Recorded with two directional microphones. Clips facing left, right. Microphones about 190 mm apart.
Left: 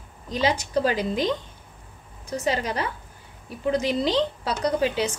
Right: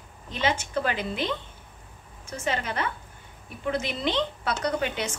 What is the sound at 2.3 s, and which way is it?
A woman's voice, 35° left (ahead or behind).